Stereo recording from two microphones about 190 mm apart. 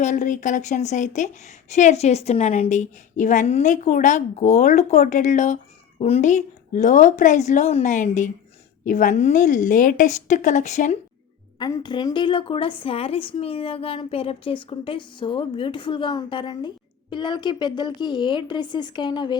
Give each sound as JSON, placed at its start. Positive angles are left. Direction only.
{"t": 0.0, "sound": "a woman's voice", "side_deg": 40}
{"t": 11.6, "sound": "a woman's voice", "side_deg": 20}